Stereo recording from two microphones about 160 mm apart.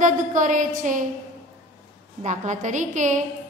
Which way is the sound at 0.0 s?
50° right (ahead or behind).